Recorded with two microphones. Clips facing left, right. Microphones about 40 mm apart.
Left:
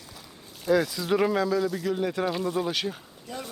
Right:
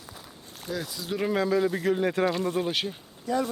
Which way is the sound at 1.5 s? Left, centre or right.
Right.